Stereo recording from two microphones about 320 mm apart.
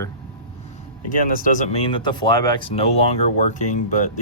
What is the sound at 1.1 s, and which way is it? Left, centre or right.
Speech, left.